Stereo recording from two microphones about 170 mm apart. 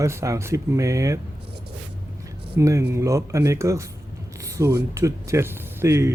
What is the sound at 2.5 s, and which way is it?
Speech, 15° right (ahead or behind).